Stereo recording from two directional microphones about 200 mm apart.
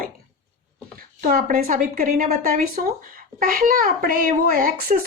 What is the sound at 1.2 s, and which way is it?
Speech, 45° right (ahead or behind).